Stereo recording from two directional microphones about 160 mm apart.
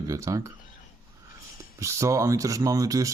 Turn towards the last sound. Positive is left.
turn(degrees=-20)  # may be behind; listen again after turning